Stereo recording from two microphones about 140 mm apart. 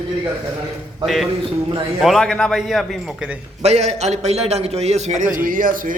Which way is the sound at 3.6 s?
50° right (ahead or behind).